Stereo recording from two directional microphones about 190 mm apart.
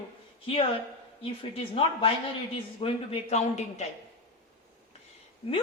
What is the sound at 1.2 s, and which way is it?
Speech, 30° left (ahead or behind).